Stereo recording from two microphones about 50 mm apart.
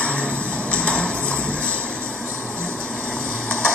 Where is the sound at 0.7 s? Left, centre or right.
Left.